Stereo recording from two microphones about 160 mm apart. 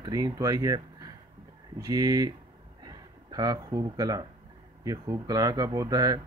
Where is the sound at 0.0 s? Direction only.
25° right (ahead or behind).